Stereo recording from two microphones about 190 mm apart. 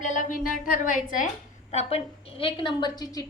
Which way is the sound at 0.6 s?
45° left (ahead or behind).